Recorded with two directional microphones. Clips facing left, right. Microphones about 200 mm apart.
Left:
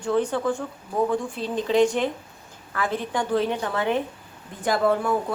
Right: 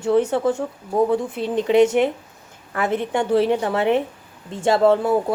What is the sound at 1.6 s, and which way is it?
Speech, 25° right (ahead or behind).